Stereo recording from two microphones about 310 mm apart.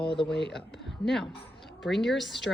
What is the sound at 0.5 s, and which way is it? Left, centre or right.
Speech, centre.